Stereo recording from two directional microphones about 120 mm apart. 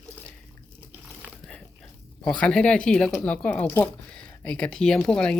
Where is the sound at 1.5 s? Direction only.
5° left (ahead or behind).